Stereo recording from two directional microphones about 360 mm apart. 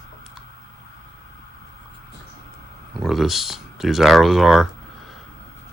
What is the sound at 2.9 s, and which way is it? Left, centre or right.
Speech, centre.